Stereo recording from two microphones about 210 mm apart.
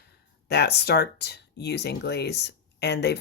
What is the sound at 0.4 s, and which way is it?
Speech, 50° left (ahead or behind).